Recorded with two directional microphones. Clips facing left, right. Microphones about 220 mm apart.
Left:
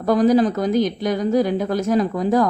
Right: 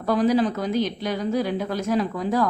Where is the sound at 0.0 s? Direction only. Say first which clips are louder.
Left 5 dB; 45° left (ahead or behind).